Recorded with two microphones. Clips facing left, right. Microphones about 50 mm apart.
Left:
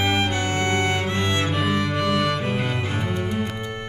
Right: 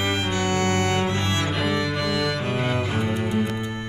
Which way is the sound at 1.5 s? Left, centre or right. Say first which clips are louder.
Left 1 dB; centre.